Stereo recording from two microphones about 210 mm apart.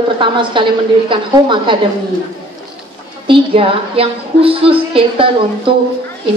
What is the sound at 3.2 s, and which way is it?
A woman's voice, 25° right (ahead or behind).